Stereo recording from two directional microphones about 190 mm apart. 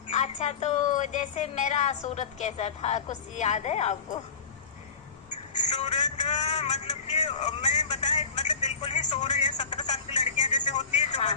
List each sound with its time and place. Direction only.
0.1 s a woman's voice: 35° left (ahead or behind)
5.5 s vehicle: 35° left (ahead or behind)
8.1 s telephone: 35° left (ahead or behind)